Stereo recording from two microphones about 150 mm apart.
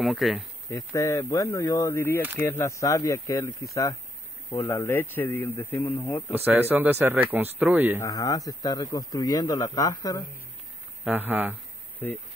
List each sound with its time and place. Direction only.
0.0 s speech: centre (ahead or behind)
0.7 s speech: 20° left (ahead or behind)
6.3 s speech: 15° right (ahead or behind)
8.0 s speech: 25° left (ahead or behind)
11.1 s speech: 10° right (ahead or behind)